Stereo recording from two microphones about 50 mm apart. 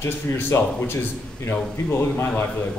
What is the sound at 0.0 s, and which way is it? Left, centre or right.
A man's voice, left.